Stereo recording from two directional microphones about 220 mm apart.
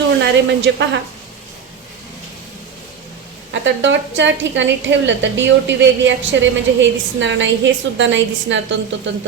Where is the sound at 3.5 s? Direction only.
55° right (ahead or behind).